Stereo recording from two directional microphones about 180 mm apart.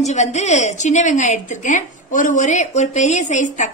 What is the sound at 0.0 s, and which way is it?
A woman's voice, 40° left (ahead or behind).